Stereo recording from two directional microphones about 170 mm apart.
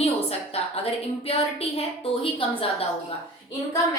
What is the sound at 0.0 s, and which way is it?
A woman's voice, 35° left (ahead or behind).